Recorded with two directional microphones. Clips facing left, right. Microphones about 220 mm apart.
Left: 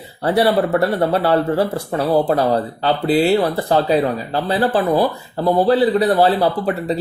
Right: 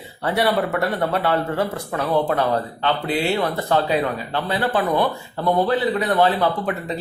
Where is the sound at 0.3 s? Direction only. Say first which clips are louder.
Left 5 dB; 35° left (ahead or behind).